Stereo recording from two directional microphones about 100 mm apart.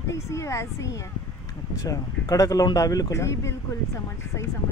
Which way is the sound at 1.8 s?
35° left (ahead or behind).